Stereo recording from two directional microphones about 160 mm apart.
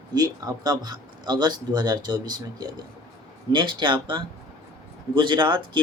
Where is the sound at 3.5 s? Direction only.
30° right (ahead or behind).